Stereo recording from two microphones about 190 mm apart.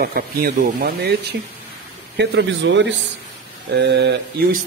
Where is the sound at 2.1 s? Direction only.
65° right (ahead or behind).